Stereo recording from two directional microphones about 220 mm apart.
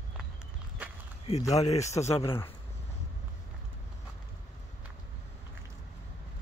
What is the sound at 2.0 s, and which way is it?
Speech, 25° left (ahead or behind).